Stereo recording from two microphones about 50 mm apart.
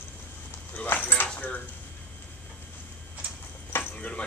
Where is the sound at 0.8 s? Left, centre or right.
Left.